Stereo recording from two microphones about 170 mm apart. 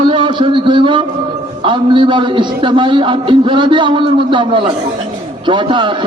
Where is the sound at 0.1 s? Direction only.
30° right (ahead or behind).